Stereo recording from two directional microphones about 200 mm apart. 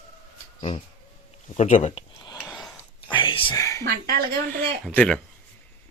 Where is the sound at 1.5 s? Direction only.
35° left (ahead or behind).